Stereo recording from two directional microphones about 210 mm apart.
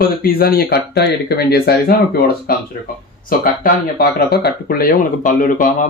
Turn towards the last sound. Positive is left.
turn(degrees=40)  # may be behind; listen again after turning